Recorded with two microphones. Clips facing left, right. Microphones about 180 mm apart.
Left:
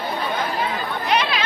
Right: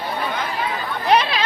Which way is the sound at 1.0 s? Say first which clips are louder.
Right 4 dB; 40° right (ahead or behind).